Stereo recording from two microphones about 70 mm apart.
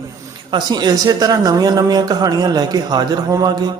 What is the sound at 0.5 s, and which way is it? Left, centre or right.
A man's voice, right.